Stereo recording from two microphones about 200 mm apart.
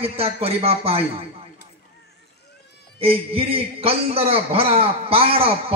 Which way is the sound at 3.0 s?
30° right (ahead or behind).